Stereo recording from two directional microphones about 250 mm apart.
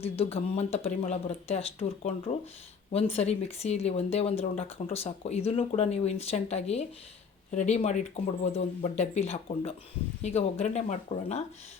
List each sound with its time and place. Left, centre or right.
0.0 s speech: left